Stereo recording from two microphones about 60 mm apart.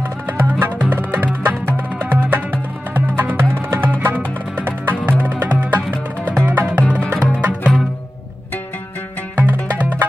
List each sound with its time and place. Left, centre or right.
0.3 s music: right
9.4 s music: right